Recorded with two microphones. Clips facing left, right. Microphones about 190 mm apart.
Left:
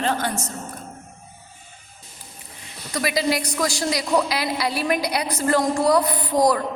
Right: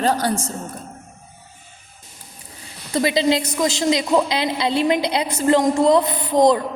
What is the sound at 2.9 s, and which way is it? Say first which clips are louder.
A woman's voice: right 5 dB; 25° right (ahead or behind).